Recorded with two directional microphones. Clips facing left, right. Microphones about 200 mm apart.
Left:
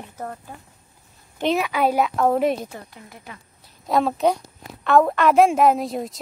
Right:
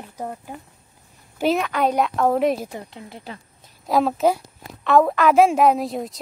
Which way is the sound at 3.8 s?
Centre (ahead or behind).